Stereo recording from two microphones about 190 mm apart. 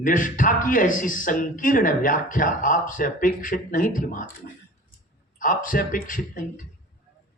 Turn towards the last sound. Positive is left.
turn(degrees=45)  # may be behind; listen again after turning